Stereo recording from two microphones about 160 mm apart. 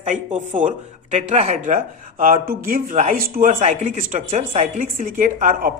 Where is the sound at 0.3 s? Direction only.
55° right (ahead or behind).